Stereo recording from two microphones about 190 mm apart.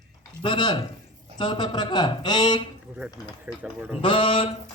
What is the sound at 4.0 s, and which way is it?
Speech, 25° left (ahead or behind).